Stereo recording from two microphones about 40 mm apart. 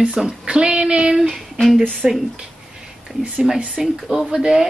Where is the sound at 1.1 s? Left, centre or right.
Centre.